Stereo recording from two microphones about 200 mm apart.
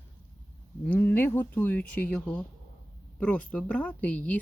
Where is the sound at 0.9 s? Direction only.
10° left (ahead or behind).